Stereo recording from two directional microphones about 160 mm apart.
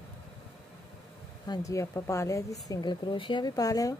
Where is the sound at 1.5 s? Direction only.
20° left (ahead or behind).